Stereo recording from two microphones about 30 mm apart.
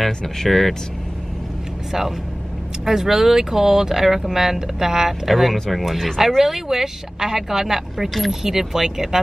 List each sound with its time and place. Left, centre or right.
0.4 s speech: centre
1.9 s speech: centre
5.3 s speech: centre
6.1 s speech: centre